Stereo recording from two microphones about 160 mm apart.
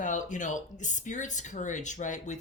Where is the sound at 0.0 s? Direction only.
50° left (ahead or behind).